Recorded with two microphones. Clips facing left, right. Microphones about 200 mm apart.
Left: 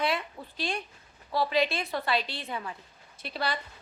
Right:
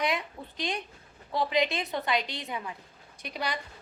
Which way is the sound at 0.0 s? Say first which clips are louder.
Even; 15° right (ahead or behind).